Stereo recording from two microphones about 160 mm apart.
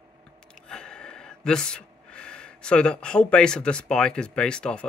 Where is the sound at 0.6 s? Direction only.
5° left (ahead or behind).